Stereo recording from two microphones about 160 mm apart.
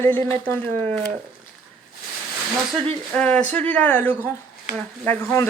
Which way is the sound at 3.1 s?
10° left (ahead or behind).